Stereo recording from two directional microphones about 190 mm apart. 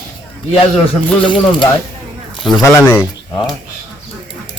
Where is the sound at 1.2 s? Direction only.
25° left (ahead or behind).